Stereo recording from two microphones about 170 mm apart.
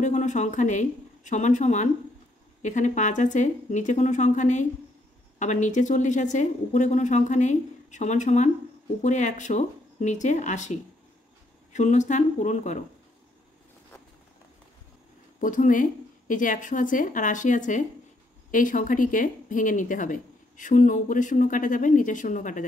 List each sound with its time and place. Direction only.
0.0 s speech: 45° left (ahead or behind)
15.4 s speech: 50° left (ahead or behind)